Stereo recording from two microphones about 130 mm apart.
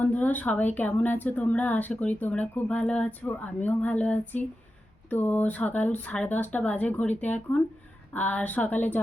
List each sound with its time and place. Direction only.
0.0 s speech: 10° left (ahead or behind)